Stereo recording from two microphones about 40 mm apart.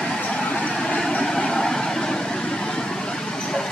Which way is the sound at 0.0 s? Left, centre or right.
Centre.